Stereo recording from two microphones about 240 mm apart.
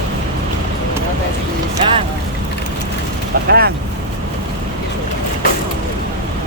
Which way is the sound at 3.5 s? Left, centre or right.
Right.